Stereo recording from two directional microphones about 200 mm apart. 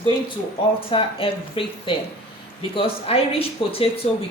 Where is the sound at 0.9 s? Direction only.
25° left (ahead or behind).